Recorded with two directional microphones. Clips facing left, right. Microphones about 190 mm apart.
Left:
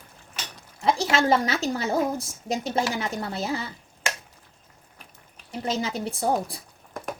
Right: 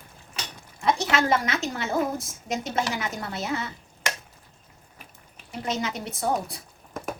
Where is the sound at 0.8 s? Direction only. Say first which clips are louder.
Left 1 dB; 30° left (ahead or behind).